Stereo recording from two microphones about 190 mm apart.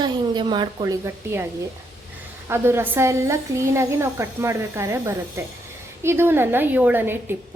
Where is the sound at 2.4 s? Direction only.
15° right (ahead or behind).